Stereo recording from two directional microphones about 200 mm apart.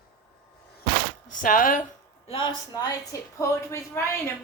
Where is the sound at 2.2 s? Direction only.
25° left (ahead or behind).